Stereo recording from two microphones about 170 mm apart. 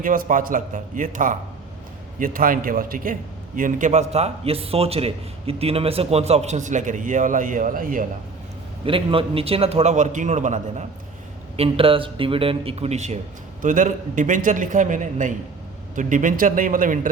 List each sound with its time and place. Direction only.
0.0 s a man's voice: 55° right (ahead or behind)
8.8 s a man's voice: 30° right (ahead or behind)
11.5 s a man's voice: 35° right (ahead or behind); by 17.1 s 50° right (ahead or behind)